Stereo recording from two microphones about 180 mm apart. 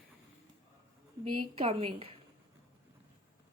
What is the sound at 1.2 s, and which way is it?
Speech, 30° right (ahead or behind).